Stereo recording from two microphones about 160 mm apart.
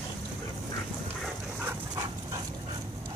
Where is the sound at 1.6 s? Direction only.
20° right (ahead or behind).